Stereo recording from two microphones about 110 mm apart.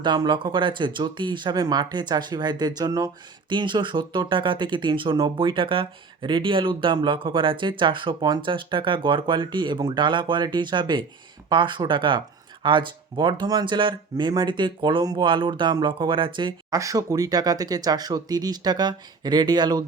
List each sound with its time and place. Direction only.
0.0 s speech: 45° right (ahead or behind)
16.7 s speech: 30° right (ahead or behind)